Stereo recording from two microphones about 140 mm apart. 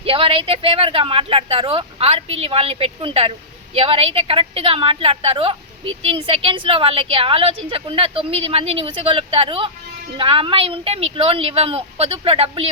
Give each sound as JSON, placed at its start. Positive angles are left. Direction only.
{"t": 0.0, "sound": "a woman's voice", "side_deg": -40}